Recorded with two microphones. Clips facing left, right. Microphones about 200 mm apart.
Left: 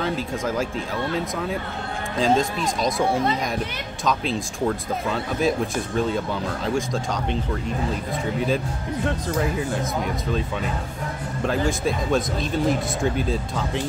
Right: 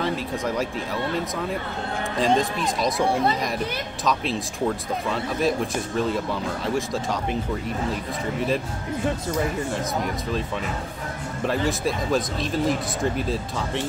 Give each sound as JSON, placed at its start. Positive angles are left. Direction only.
{"t": 0.0, "sound": "speech", "side_deg": 0}
{"t": 2.1, "sound": "speech", "side_deg": 0}
{"t": 9.0, "sound": "speech", "side_deg": 0}
{"t": 11.4, "sound": "speech", "side_deg": 0}